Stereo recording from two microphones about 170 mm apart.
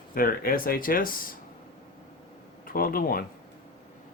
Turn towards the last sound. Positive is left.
turn(degrees=60)  # may be behind; listen again after turning